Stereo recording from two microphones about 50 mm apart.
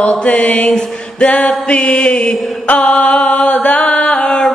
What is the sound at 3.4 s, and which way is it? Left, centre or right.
Chant, left.